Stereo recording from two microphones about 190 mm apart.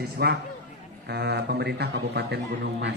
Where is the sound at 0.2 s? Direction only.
55° right (ahead or behind).